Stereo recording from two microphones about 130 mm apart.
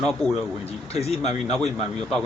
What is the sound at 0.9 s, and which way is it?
Speech, 55° left (ahead or behind).